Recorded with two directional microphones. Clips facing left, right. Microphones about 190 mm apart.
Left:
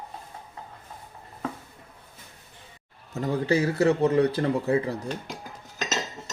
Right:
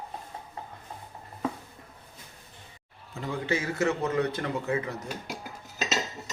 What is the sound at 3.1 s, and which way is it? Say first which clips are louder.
Speech: left 6 dB; 40° left (ahead or behind).